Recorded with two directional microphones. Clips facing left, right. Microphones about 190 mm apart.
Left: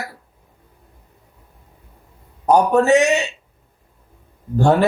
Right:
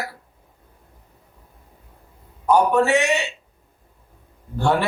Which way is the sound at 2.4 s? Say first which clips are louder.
Left 3 dB; 40° left (ahead or behind).